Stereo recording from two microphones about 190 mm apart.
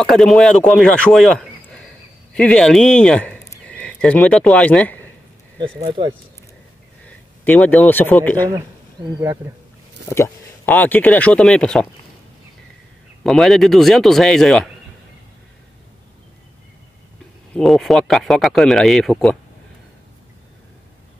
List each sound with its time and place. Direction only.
0.0 s speech: centre (ahead or behind)
5.9 s speech: 25° right (ahead or behind)
7.1 s speech: 5° left (ahead or behind)
10.0 s speech: 15° left (ahead or behind)
13.2 s speech: centre (ahead or behind)
17.6 s speech: centre (ahead or behind)